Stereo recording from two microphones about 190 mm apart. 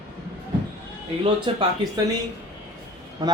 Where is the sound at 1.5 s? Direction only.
30° right (ahead or behind).